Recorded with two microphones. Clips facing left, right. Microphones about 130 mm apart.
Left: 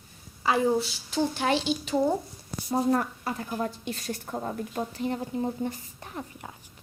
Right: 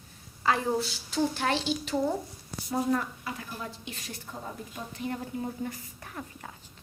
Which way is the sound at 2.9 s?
45° left (ahead or behind).